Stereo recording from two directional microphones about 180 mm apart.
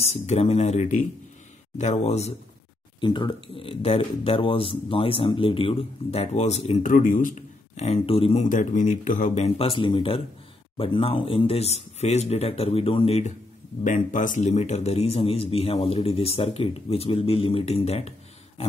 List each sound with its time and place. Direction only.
0.0 s speech: 35° left (ahead or behind)
3.0 s speech: 25° left (ahead or behind)
8.5 s speech: 45° left (ahead or behind)
13.8 s speech: 45° left (ahead or behind)